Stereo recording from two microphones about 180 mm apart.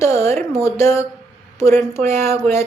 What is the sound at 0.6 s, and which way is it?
Speech, 15° left (ahead or behind).